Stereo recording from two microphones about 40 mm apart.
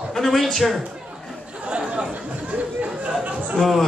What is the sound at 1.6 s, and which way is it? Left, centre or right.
Chatter, right.